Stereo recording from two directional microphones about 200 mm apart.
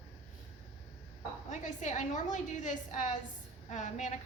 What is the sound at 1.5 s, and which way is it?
A woman's voice, 35° left (ahead or behind).